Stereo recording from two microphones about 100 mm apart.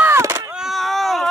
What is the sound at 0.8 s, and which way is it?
Baby cry, centre (ahead or behind).